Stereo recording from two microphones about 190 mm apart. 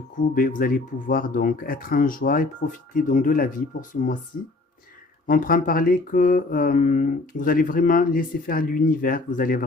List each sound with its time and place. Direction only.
0.2 s mantra: 45° left (ahead or behind)
5.2 s mantra: 45° left (ahead or behind)